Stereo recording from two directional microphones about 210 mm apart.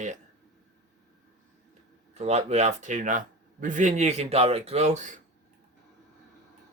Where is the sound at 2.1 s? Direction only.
30° right (ahead or behind).